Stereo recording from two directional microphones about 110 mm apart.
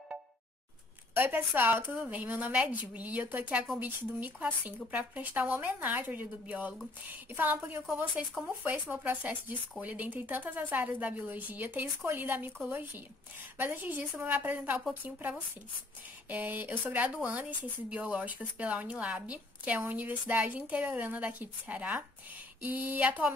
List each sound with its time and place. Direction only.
1.1 s speech: 20° right (ahead or behind)